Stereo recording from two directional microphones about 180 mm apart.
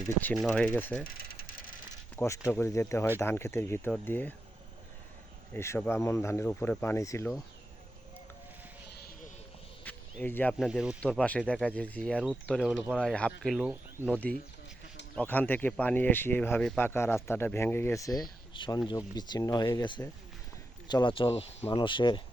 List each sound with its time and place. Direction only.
0.0 s speech: 10° left (ahead or behind)
1.0 s mechanisms: 55° left (ahead or behind)
2.1 s speech: 15° left (ahead or behind)
5.5 s speech: 15° left (ahead or behind)
9.8 s a sound: 10° left (ahead or behind)
10.7 s speech: 5° right (ahead or behind)
11.0 s speech: 5° left (ahead or behind)
14.1 s speech: 5° left (ahead or behind); by 22.2 s 25° left (ahead or behind)